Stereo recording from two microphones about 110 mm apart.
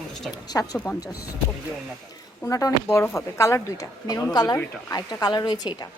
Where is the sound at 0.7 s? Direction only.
15° left (ahead or behind).